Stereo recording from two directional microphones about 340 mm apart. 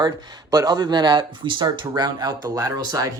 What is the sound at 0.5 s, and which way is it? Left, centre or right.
Speech, centre.